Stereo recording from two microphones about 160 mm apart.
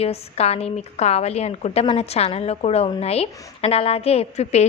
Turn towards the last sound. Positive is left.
turn(degrees=40)  # may be behind; listen again after turning